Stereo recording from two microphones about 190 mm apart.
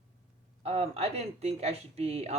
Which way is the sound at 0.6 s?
30° right (ahead or behind).